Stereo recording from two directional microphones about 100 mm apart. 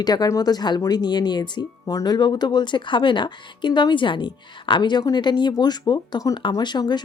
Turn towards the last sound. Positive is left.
turn(degrees=45)  # may be behind; listen again after turning